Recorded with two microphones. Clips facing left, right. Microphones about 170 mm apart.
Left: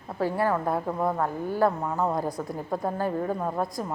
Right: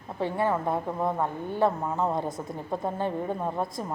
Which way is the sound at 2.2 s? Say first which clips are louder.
Left 2 dB; 20° right (ahead or behind).